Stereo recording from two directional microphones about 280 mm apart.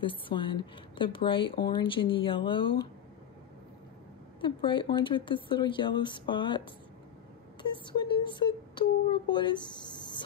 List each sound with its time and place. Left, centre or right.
0.0 s a woman's voice: centre
4.4 s a woman's voice: centre
7.7 s speech: centre